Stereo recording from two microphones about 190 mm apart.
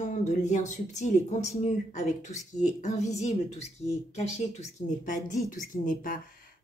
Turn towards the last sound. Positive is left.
turn(degrees=45)  # may be behind; listen again after turning